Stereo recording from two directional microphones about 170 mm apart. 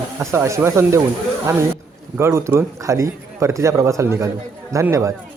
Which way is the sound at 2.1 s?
15° right (ahead or behind).